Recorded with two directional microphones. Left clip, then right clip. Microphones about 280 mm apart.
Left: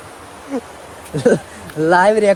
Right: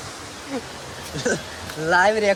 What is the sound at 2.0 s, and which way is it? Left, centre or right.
Speech, centre.